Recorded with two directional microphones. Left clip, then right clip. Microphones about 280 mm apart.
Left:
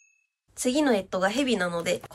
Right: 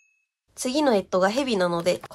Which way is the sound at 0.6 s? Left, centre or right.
Centre.